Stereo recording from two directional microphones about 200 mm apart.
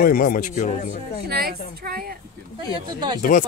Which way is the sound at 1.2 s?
50° right (ahead or behind).